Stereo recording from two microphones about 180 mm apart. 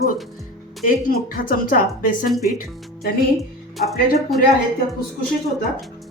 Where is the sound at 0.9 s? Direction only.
50° left (ahead or behind).